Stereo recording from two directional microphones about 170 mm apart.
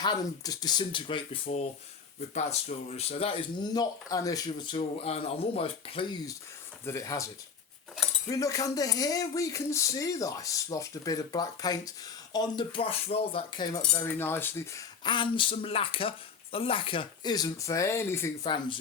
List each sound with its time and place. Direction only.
0.0 s speech: 25° left (ahead or behind)
6.8 s speech: 20° left (ahead or behind)
8.3 s speech: 20° left (ahead or behind)
15.0 s speech: 30° left (ahead or behind)
18.4 s speech: 25° left (ahead or behind)